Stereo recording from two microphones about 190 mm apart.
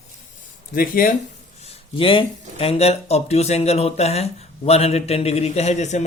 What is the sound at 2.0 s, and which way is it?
Speech, 30° left (ahead or behind).